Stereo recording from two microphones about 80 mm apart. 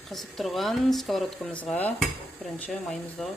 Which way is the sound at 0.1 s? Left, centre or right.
Centre.